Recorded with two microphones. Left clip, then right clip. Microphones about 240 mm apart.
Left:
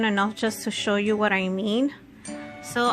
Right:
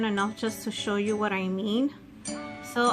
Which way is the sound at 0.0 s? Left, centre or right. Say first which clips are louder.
Left 5 dB; left.